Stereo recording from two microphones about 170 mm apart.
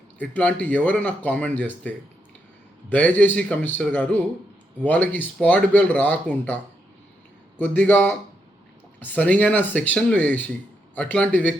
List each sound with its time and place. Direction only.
0.2 s speech: 10° left (ahead or behind)
7.6 s speech: 10° left (ahead or behind)